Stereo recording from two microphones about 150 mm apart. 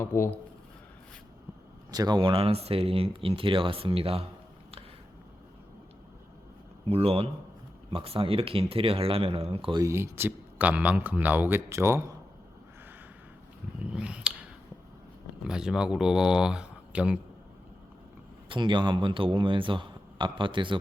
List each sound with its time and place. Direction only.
0.0 s speech: 15° left (ahead or behind)
1.9 s speech: 25° right (ahead or behind)
6.8 s speech: 40° right (ahead or behind)
9.7 s speech: 20° right (ahead or behind)
13.9 s a sound: 10° right (ahead or behind)
15.4 s speech: 5° right (ahead or behind)
18.4 s speech: 35° right (ahead or behind)